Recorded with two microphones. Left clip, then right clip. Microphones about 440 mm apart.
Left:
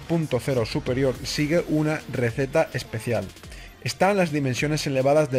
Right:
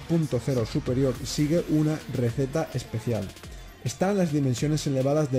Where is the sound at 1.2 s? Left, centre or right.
Left.